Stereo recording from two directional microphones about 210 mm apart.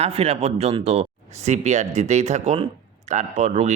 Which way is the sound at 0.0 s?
30° right (ahead or behind).